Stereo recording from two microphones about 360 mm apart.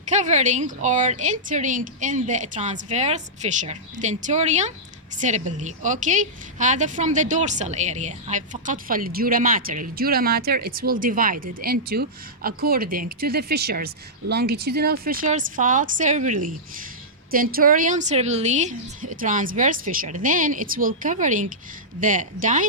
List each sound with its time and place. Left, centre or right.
0.1 s a woman's voice: centre